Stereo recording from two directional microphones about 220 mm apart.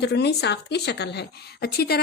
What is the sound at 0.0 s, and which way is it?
A woman's voice, 50° left (ahead or behind).